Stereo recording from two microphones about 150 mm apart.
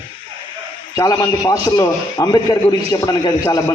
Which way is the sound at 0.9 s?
25° left (ahead or behind).